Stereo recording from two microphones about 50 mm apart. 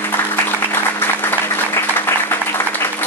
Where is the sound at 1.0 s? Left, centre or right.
Left.